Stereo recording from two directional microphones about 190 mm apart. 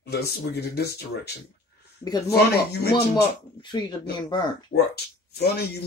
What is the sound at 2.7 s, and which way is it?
Speech, 60° left (ahead or behind).